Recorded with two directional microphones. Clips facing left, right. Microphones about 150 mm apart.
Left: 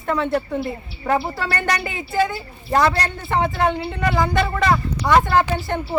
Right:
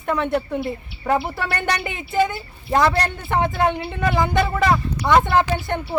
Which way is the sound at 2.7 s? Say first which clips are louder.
Even; centre (ahead or behind).